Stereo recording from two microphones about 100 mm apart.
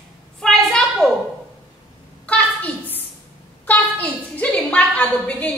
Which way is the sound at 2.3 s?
15° left (ahead or behind).